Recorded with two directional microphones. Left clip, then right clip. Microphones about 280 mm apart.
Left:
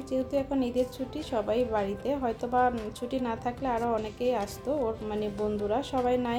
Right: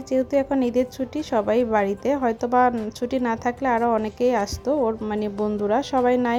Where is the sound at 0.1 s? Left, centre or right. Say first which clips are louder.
Right 8 dB; right.